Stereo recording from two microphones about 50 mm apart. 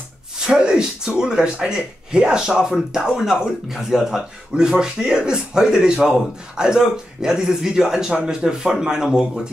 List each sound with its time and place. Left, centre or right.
0.5 s speech: centre